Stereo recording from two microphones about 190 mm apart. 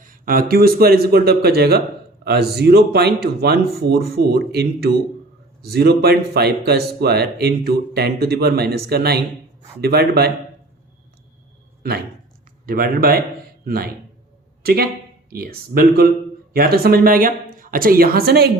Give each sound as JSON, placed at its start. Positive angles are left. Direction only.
{"t": 0.0, "sound": "speech", "side_deg": -50}
{"t": 11.8, "sound": "speech", "side_deg": -55}